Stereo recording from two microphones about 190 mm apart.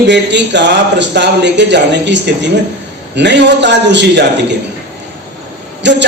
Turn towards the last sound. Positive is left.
turn(degrees=-65)  # may be behind; listen again after turning